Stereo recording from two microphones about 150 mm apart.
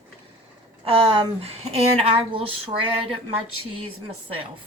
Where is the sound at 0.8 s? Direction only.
40° right (ahead or behind).